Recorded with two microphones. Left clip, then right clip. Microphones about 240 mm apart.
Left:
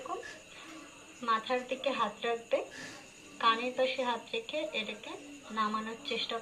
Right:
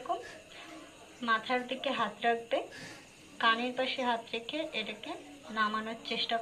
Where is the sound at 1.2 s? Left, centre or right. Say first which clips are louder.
Right 1 dB; right.